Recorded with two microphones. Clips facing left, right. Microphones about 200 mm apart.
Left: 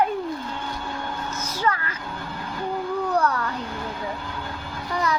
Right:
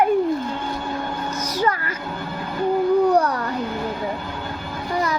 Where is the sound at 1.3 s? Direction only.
10° right (ahead or behind).